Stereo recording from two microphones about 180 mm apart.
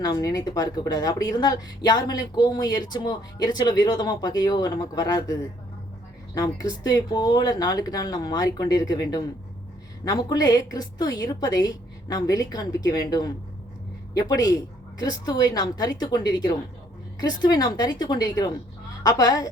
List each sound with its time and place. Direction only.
0.0 s a woman's voice: 20° left (ahead or behind)